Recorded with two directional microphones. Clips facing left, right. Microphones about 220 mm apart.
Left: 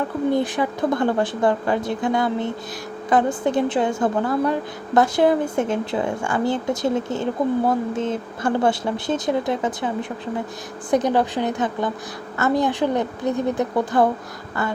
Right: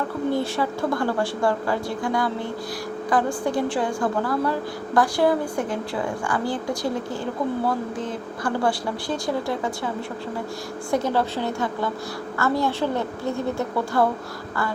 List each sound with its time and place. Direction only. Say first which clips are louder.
0.3 s a woman's voice: left 3 dB; 20° left (ahead or behind)
10.9 s a woman's voice: left 4 dB; 15° left (ahead or behind)